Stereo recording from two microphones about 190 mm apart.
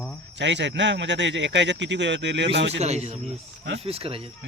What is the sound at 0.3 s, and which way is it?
A man's voice, 70° right (ahead or behind).